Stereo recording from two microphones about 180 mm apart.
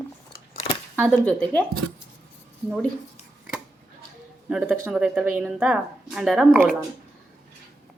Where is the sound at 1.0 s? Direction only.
5° left (ahead or behind).